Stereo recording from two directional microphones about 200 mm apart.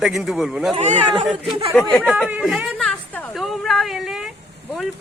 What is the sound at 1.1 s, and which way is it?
Speech, centre (ahead or behind).